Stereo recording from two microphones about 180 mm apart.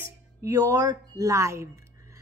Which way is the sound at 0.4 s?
20° right (ahead or behind).